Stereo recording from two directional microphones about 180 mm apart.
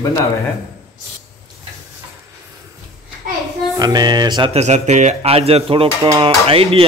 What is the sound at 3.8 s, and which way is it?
Speech, 20° right (ahead or behind).